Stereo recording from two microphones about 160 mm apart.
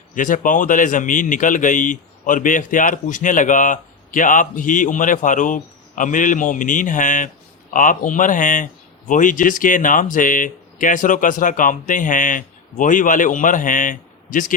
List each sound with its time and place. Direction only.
0.1 s a man's voice: 55° left (ahead or behind)